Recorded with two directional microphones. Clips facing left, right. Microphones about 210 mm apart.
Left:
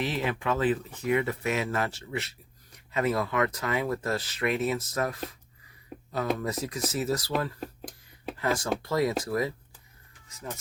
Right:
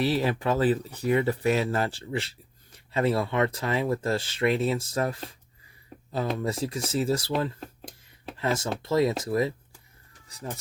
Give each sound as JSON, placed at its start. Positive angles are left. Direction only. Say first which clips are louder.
{"t": 0.0, "sound": "speech", "louder": "right 4 dB", "side_deg": -35}